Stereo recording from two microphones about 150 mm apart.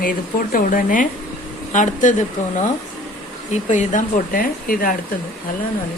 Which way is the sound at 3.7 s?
55° left (ahead or behind).